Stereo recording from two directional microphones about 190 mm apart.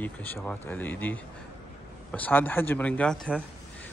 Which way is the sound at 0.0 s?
10° left (ahead or behind).